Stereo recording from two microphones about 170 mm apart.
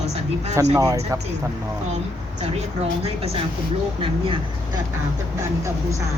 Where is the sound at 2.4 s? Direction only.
40° right (ahead or behind).